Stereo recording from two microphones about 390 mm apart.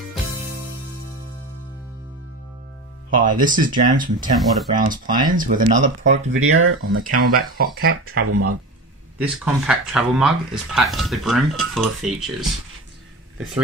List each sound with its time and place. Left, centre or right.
3.2 s speech: centre
6.3 s speech: right
7.5 s speech: right
8.3 s speech: right
9.2 s speech: centre